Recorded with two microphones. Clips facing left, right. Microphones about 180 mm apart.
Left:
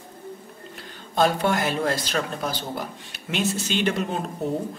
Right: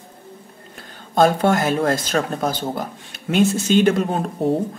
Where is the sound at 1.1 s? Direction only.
45° right (ahead or behind).